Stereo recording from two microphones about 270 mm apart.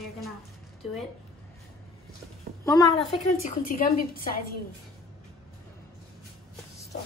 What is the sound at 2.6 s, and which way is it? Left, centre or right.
Speech, centre.